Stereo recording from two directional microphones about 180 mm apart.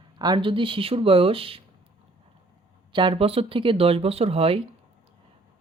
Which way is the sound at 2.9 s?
30° right (ahead or behind).